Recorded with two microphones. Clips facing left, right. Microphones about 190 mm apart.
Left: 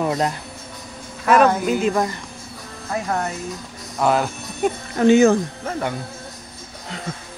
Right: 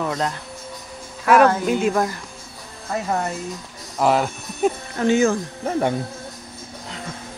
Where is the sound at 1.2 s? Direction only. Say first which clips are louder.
Even; 5° right (ahead or behind).